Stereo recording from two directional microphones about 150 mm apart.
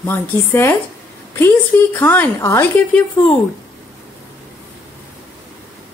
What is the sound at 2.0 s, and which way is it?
Speech, 15° left (ahead or behind).